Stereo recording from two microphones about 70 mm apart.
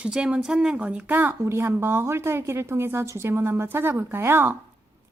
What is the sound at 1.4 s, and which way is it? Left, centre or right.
A woman's voice, right.